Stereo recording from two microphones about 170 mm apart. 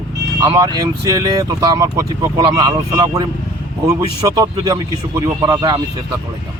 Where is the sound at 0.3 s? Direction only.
20° right (ahead or behind).